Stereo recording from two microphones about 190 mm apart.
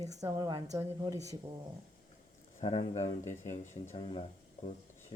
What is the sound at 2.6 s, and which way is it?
Speech, 30° left (ahead or behind).